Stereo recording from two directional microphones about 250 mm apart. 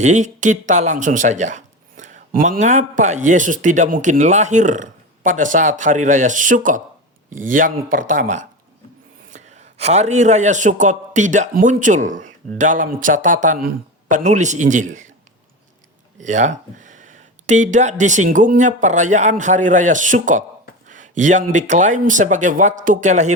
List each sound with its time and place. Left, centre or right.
0.0 s a man's voice: right
16.1 s speech: right
20.9 s a sound: right
21.5 s speech: right